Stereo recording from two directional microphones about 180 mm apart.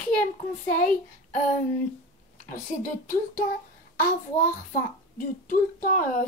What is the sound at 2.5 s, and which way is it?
Speech, 50° left (ahead or behind).